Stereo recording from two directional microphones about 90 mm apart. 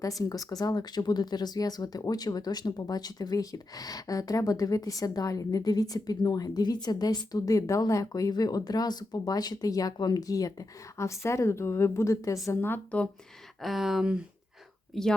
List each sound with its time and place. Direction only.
0.2 s speech: 45° left (ahead or behind)
12.5 s speech: 25° left (ahead or behind)
13.6 s speech: centre (ahead or behind)